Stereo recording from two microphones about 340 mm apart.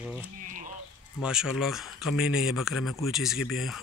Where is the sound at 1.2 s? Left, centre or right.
Centre.